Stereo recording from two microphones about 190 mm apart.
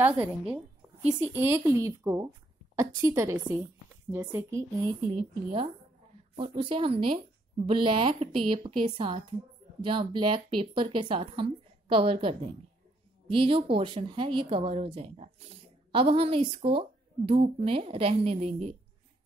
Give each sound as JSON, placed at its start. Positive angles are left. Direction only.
{"t": 0.0, "sound": "a woman's voice", "side_deg": -10}